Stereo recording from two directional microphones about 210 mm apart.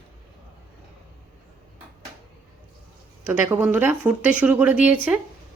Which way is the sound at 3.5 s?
10° right (ahead or behind).